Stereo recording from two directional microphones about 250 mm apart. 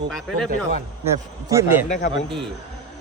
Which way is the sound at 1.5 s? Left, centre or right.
Centre.